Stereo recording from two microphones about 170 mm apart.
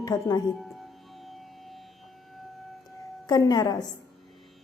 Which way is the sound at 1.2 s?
Centre (ahead or behind).